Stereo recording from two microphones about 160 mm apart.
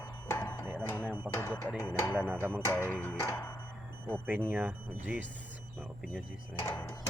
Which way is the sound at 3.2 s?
20° left (ahead or behind).